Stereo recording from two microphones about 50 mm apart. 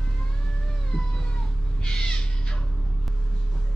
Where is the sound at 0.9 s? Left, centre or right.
Centre.